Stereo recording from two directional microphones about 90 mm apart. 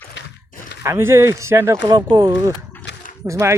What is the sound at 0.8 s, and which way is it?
Speech, 30° right (ahead or behind).